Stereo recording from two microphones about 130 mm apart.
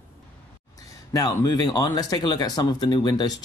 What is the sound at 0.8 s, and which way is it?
Speech, 25° left (ahead or behind).